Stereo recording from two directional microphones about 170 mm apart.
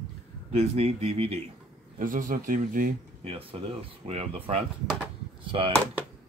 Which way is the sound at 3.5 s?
35° right (ahead or behind).